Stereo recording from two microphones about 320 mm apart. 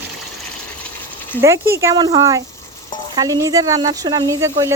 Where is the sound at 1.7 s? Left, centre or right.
Centre.